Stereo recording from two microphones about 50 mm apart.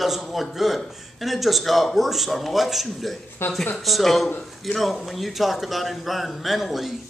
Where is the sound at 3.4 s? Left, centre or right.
Left.